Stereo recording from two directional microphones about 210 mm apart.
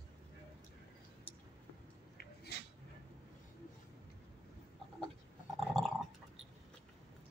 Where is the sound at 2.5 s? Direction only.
50° left (ahead or behind).